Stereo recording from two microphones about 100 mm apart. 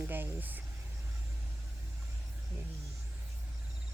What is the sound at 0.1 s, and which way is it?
Speech, 20° right (ahead or behind).